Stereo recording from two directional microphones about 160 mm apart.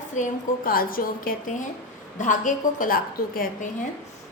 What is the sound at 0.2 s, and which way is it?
A woman's voice, 65° left (ahead or behind).